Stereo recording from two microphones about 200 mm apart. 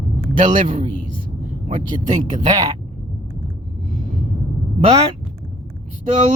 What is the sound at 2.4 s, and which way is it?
Speech, 20° right (ahead or behind).